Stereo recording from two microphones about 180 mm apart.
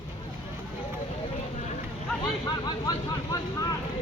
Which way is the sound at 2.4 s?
20° left (ahead or behind).